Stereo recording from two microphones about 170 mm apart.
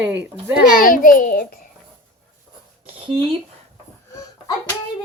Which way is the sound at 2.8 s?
35° right (ahead or behind).